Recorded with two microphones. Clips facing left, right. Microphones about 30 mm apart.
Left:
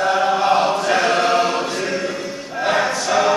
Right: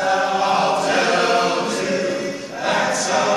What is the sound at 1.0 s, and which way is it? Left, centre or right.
Chant, centre.